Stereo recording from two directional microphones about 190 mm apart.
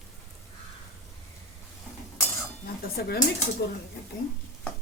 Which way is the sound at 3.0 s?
55° left (ahead or behind).